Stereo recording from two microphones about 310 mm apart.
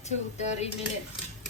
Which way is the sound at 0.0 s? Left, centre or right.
Left.